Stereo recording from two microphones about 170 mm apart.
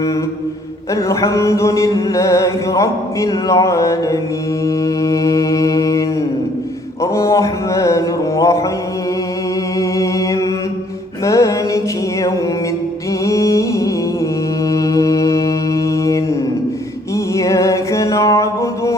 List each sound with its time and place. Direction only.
0.9 s music: 15° left (ahead or behind)
4.6 s mantra: 20° left (ahead or behind)
7.0 s music: 15° left (ahead or behind)
9.7 s mantra: 20° left (ahead or behind)
11.3 s music: 20° left (ahead or behind)
13.2 s music: 20° left (ahead or behind)
14.7 s mantra: 20° left (ahead or behind)
17.3 s music: 20° left (ahead or behind)